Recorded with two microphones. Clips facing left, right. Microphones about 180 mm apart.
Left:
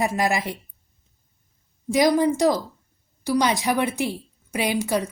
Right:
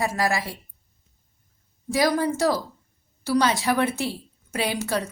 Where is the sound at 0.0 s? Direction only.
20° left (ahead or behind).